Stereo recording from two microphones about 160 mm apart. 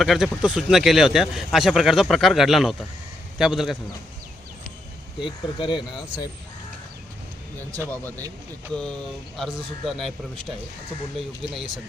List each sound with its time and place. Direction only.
0.0 s a man's voice: centre (ahead or behind)
5.2 s speech: 30° left (ahead or behind)
7.8 s a man's voice: 10° left (ahead or behind)